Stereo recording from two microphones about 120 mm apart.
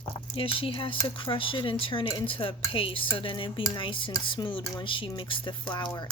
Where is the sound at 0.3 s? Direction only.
50° left (ahead or behind).